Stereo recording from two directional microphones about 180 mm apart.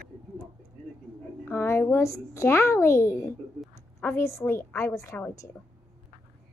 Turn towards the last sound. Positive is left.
turn(degrees=15)  # may be behind; listen again after turning